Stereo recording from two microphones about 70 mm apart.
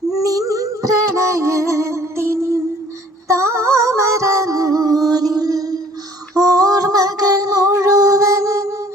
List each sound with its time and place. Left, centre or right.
0.1 s music: right
6.3 s female singing: right